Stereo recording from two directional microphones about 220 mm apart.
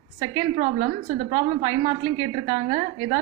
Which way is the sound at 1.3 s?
15° right (ahead or behind).